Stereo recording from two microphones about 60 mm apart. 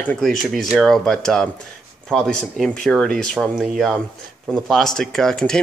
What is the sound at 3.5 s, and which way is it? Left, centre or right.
Speech, centre.